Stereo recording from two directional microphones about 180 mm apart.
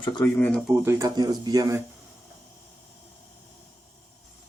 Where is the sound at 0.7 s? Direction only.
15° right (ahead or behind).